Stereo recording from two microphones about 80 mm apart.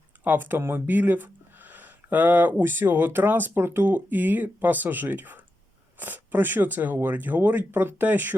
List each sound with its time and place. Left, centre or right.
0.3 s speech: right